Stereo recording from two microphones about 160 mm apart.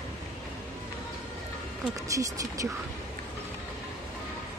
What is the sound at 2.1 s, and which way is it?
Speech, 20° right (ahead or behind).